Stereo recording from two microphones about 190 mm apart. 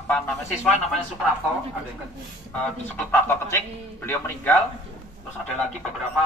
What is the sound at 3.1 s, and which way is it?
Speech, 15° left (ahead or behind).